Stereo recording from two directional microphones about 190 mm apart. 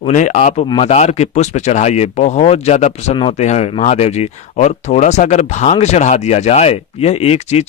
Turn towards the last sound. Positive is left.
turn(degrees=35)  # may be behind; listen again after turning